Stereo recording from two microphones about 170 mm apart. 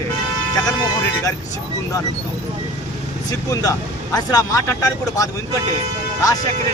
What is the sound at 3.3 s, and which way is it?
Speech, 20° left (ahead or behind).